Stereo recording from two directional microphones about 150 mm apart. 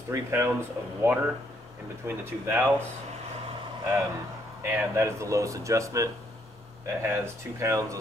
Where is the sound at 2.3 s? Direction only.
15° right (ahead or behind).